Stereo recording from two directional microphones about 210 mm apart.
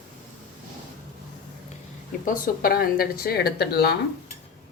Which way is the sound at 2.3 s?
45° left (ahead or behind).